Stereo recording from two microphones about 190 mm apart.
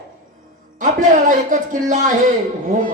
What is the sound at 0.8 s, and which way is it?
A man's voice, 45° right (ahead or behind).